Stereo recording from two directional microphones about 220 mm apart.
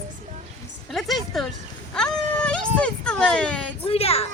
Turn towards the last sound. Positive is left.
turn(degrees=25)  # may be behind; listen again after turning